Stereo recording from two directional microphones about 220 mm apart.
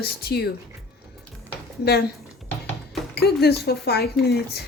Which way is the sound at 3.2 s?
45° left (ahead or behind).